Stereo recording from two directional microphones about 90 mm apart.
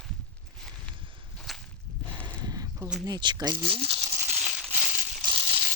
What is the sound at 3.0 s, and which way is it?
Speech, 55° right (ahead or behind).